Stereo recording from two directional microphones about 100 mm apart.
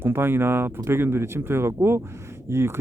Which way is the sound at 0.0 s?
20° right (ahead or behind).